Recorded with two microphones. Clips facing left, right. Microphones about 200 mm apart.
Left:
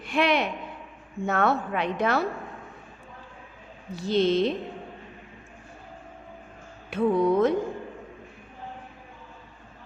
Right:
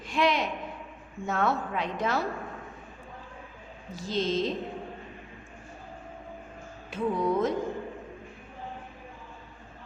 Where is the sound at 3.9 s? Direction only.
65° left (ahead or behind).